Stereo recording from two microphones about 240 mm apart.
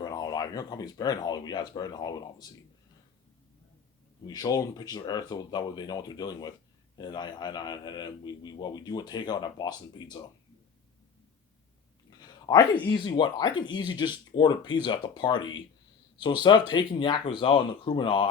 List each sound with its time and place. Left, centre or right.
0.0 s a man's voice: centre
4.3 s a man's voice: centre
12.1 s a sound: centre
12.9 s speech: centre